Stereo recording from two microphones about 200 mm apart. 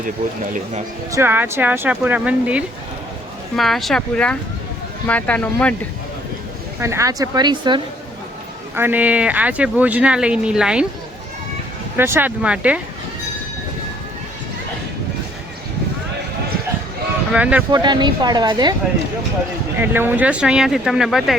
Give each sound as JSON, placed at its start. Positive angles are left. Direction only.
{"t": 1.1, "sound": "speech", "side_deg": -10}
{"t": 6.7, "sound": "speech", "side_deg": -15}
{"t": 8.7, "sound": "speech", "side_deg": -10}
{"t": 11.9, "sound": "speech", "side_deg": -10}
{"t": 17.3, "sound": "speech", "side_deg": -5}
{"t": 17.7, "sound": "speech", "side_deg": -20}
{"t": 19.8, "sound": "speech", "side_deg": -10}